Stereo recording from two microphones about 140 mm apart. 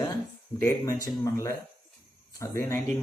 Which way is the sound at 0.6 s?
20° left (ahead or behind).